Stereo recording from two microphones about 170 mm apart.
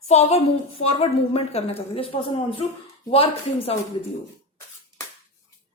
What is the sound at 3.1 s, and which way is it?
Speech, 35° left (ahead or behind).